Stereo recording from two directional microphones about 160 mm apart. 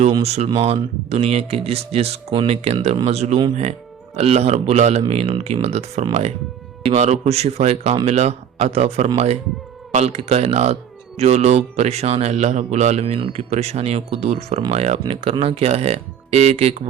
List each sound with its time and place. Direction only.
0.0 s a man's voice: 40° right (ahead or behind)